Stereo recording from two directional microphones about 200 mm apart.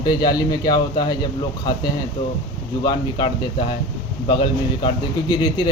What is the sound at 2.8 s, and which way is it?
A man's voice, 20° left (ahead or behind).